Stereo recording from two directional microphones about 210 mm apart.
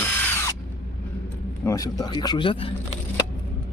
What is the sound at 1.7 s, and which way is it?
Speech, 15° left (ahead or behind).